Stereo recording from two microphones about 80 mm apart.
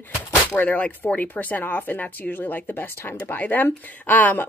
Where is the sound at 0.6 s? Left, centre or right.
Centre.